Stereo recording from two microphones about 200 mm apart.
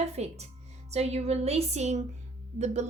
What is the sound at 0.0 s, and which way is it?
A woman's voice, 35° right (ahead or behind).